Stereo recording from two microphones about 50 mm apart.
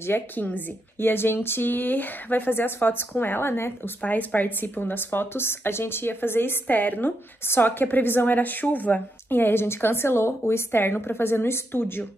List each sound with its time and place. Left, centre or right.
0.4 s a woman's voice: left
0.9 s a woman's voice: left
4.0 s a woman's voice: left